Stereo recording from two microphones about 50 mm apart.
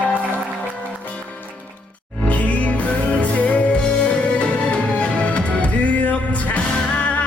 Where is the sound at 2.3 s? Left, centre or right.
Left.